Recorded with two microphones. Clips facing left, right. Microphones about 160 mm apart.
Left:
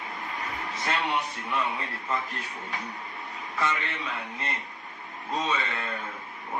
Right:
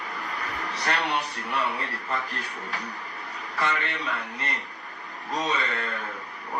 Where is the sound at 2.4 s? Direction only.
75° right (ahead or behind).